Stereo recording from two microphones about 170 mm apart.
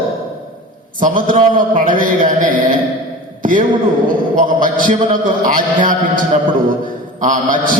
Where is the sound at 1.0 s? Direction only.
50° right (ahead or behind).